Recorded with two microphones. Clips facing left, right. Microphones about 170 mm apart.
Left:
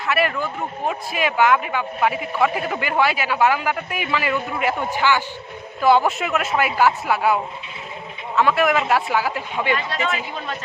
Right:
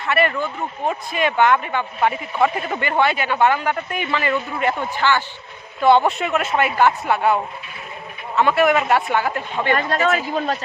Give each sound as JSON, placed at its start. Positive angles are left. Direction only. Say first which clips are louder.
{"t": 0.0, "sound": "speech", "louder": "right 2 dB", "side_deg": 0}
{"t": 9.6, "sound": "a man's voice", "louder": "right 6 dB", "side_deg": -50}